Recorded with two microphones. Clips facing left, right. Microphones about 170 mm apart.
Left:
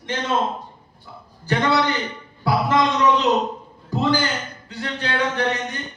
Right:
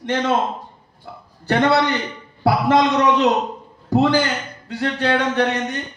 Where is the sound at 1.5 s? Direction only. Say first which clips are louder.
Right 3 dB; 65° right (ahead or behind).